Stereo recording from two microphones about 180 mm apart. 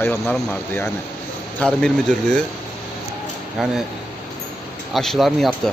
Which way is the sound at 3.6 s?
Centre (ahead or behind).